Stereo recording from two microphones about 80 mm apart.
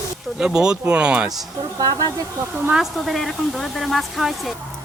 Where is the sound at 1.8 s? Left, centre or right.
Right.